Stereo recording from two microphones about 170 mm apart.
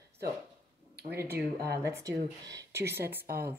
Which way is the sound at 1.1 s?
15° right (ahead or behind).